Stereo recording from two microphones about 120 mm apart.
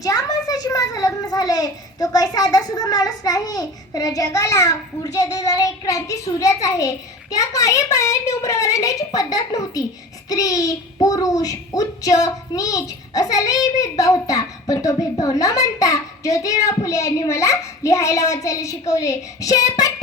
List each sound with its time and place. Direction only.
0.0 s a child's voice: 30° left (ahead or behind)